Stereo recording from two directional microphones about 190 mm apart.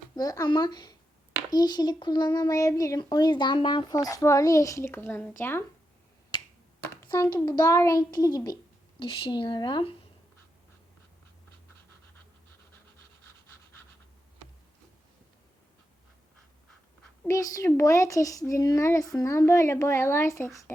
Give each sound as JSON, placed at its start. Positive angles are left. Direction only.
{"t": 0.2, "sound": "speech", "side_deg": 20}
{"t": 7.4, "sound": "speech", "side_deg": 20}
{"t": 17.2, "sound": "a child's voice", "side_deg": 15}